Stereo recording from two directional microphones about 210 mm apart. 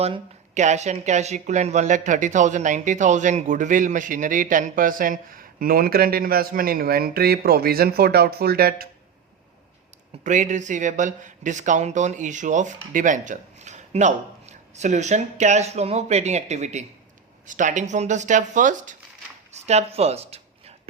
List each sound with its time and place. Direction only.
0.0 s speech: 30° right (ahead or behind); by 8.9 s 45° right (ahead or behind)
10.2 s speech: 35° right (ahead or behind)
19.5 s a sound: 30° right (ahead or behind)